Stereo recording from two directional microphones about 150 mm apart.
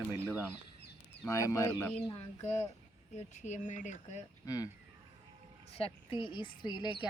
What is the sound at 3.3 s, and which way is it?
Speech, 55° left (ahead or behind).